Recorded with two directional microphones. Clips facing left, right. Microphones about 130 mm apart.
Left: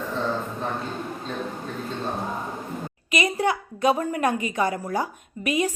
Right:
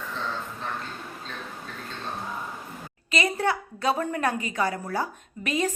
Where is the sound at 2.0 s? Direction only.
35° left (ahead or behind).